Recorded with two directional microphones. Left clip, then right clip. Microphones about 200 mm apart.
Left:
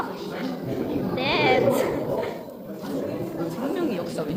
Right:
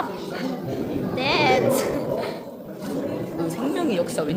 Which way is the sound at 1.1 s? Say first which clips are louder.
Right 2 dB; 10° right (ahead or behind).